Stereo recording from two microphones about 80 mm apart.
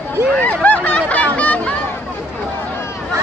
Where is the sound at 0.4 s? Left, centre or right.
Left.